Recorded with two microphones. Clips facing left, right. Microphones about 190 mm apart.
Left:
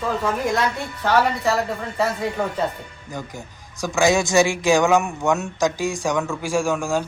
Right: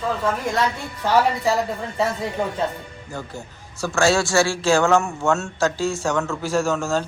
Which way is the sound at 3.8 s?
15° left (ahead or behind).